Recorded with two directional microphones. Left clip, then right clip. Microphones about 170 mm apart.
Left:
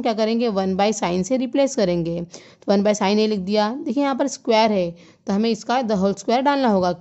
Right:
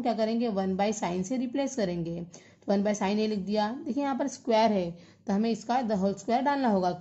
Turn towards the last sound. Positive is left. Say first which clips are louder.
# left 8 dB
turn(degrees=45)  # may be behind; listen again after turning